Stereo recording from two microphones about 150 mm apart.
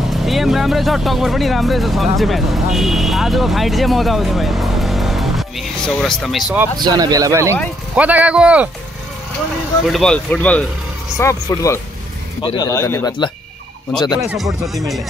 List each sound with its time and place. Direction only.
0.1 s speech: centre (ahead or behind)
6.8 s speech: 25° right (ahead or behind)
7.9 s a man's voice: 10° right (ahead or behind)
9.8 s speech: centre (ahead or behind)
11.1 s speech: 20° left (ahead or behind)
13.9 s speech: 5° left (ahead or behind)